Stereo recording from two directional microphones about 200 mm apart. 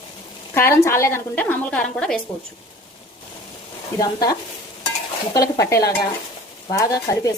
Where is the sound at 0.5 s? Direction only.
10° left (ahead or behind).